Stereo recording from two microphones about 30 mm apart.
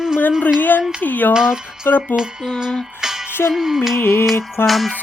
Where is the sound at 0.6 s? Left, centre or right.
Left.